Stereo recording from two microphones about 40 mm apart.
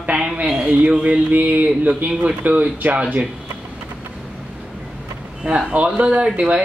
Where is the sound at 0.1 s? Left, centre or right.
Right.